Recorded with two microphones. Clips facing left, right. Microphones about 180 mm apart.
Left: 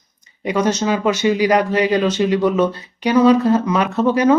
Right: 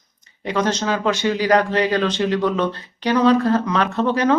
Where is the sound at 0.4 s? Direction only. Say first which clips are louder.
Left 3 dB; 10° left (ahead or behind).